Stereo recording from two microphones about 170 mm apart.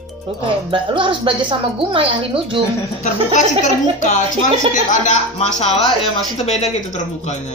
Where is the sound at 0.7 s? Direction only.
30° right (ahead or behind).